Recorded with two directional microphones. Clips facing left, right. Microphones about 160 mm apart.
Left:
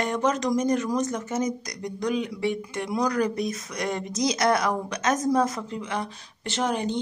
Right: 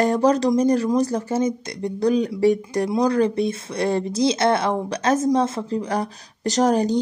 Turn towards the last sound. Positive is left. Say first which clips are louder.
# right 8 dB
turn(degrees=-40)  # may be behind; listen again after turning